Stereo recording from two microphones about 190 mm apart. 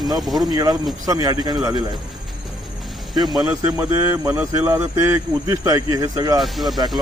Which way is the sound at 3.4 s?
15° right (ahead or behind).